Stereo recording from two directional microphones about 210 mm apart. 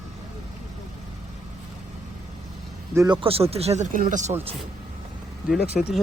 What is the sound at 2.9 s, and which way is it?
Speech, 15° right (ahead or behind).